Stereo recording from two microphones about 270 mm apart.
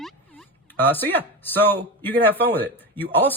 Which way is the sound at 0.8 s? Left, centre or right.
Centre.